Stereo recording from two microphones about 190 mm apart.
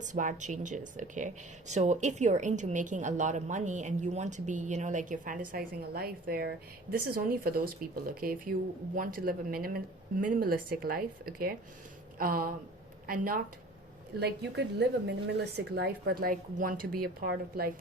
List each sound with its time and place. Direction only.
0.0 s speech: 40° right (ahead or behind)
14.2 s a woman's voice: 60° right (ahead or behind)